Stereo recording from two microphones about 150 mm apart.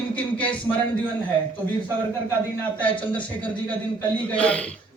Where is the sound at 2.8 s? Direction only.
35° left (ahead or behind).